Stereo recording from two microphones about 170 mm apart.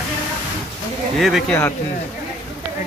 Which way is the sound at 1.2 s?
Centre (ahead or behind).